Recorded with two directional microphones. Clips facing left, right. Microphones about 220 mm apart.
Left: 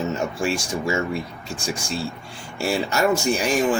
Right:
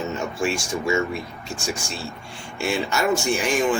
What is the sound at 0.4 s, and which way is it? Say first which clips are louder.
Speech: right 2 dB; 35° left (ahead or behind).